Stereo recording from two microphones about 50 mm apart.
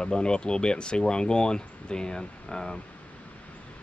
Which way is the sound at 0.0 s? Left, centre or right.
Centre.